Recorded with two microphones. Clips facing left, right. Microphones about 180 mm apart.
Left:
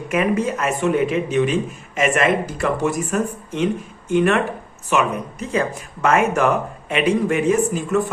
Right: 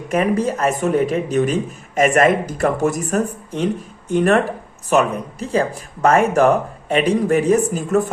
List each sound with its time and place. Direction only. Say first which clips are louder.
0.1 s speech: right 2 dB; 35° right (ahead or behind)